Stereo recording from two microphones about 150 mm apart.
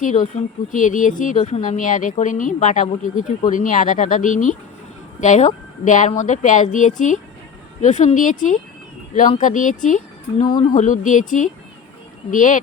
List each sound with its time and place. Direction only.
0.0 s speech: 55° left (ahead or behind)